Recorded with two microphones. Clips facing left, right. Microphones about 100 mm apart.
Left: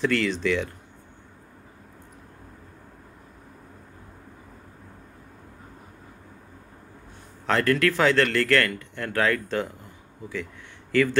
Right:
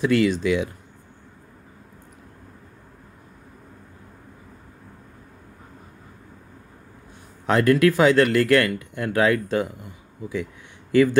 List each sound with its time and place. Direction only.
0.0 s speech: 15° right (ahead or behind)
7.4 s speech: 15° right (ahead or behind)
10.9 s speech: 15° right (ahead or behind)